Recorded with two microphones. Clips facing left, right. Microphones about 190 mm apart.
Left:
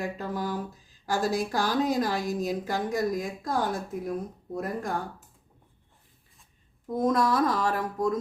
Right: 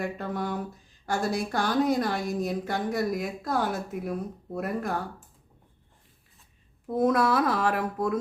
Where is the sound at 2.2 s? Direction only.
55° right (ahead or behind).